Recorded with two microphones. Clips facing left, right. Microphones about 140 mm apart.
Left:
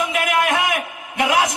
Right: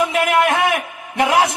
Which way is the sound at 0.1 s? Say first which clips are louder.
Right 3 dB; 30° right (ahead or behind).